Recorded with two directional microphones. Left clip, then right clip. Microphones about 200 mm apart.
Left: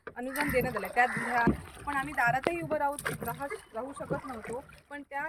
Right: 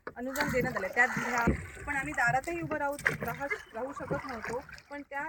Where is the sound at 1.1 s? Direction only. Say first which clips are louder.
Left 1 dB; 20° right (ahead or behind).